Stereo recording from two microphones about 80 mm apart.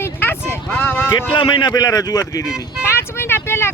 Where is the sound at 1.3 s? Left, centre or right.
Left.